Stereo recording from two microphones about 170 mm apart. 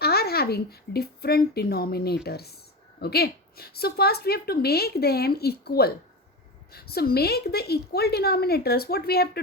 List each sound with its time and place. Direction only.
0.0 s a woman's voice: 70° left (ahead or behind)